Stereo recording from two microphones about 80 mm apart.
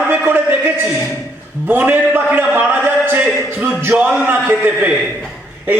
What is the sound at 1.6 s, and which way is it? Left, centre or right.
A man's voice, right.